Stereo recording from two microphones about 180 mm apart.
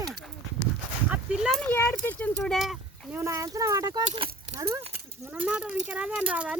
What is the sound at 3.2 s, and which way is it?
Speech, 15° right (ahead or behind).